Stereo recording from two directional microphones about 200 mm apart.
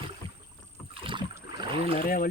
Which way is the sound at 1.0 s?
25° right (ahead or behind).